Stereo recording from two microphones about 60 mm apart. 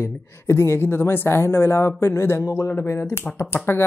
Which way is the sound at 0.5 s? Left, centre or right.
Left.